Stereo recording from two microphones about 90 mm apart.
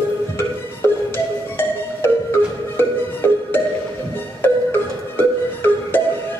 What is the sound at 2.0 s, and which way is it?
Marimba, 25° left (ahead or behind).